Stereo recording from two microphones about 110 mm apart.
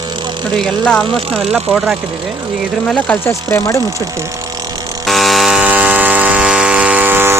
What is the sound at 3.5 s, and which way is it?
Speech, 30° left (ahead or behind).